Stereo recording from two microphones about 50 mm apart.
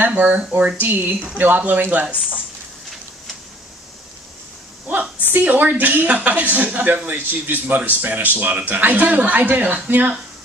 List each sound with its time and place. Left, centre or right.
0.0 s speech: right
2.1 s speech: centre
5.3 s speech: right